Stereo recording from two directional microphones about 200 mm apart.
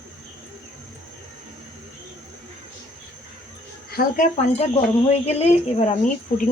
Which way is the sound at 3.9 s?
45° left (ahead or behind).